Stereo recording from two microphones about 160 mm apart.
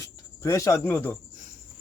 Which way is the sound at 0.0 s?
20° left (ahead or behind).